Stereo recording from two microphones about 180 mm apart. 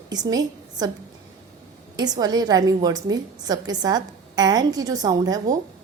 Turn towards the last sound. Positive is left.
turn(degrees=-20)  # may be behind; listen again after turning